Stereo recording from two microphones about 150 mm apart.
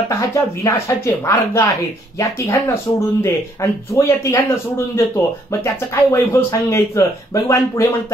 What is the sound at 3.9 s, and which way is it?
Speech, 20° left (ahead or behind).